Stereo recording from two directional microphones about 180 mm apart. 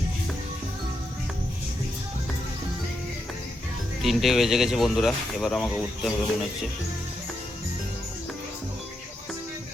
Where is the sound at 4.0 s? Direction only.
Centre (ahead or behind).